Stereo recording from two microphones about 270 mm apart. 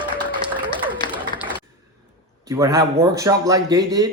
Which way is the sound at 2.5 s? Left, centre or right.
Centre.